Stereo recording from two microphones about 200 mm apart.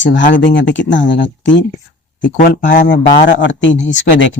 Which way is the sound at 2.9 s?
65° left (ahead or behind).